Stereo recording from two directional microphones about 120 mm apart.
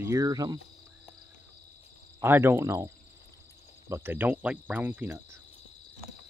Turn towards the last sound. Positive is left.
turn(degrees=-20)  # may be behind; listen again after turning